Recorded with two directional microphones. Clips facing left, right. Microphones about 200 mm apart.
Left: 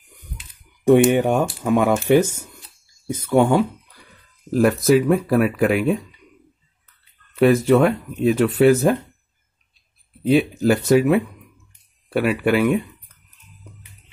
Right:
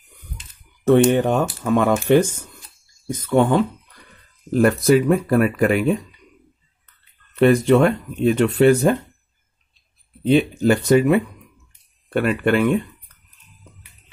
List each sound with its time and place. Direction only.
0.1 s typing: 15° left (ahead or behind)
1.0 s speech: 10° left (ahead or behind)
10.2 s speech: 5° left (ahead or behind)